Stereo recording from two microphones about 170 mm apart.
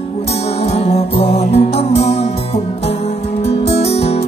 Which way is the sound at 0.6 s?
40° left (ahead or behind).